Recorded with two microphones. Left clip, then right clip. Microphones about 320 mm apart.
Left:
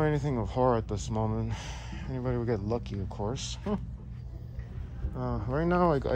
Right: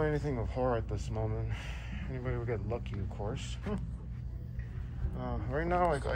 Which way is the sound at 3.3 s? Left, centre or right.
Centre.